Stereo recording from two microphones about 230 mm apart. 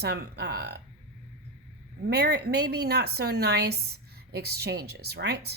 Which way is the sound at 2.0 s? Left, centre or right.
Right.